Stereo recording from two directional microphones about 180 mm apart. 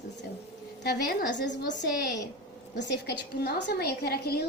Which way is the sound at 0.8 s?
60° left (ahead or behind).